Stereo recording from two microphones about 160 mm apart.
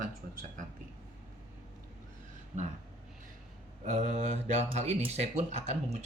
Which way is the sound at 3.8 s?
45° right (ahead or behind).